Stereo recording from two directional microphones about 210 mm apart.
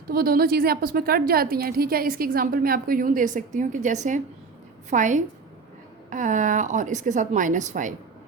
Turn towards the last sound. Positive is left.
turn(degrees=-35)  # may be behind; listen again after turning